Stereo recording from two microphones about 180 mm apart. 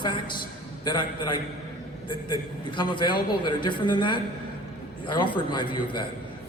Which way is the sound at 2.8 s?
25° left (ahead or behind).